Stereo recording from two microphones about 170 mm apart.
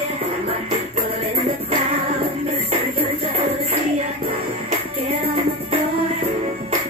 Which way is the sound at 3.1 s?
35° right (ahead or behind).